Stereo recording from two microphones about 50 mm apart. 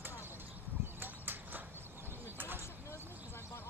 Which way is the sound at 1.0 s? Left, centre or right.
Right.